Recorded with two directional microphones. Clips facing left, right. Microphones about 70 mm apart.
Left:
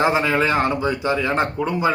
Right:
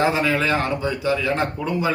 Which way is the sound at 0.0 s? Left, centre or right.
Left.